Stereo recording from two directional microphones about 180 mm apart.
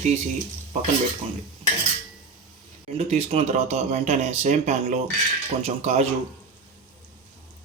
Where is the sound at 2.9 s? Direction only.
35° right (ahead or behind).